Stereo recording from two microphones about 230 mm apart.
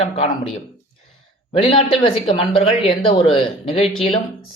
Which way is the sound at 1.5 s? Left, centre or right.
Left.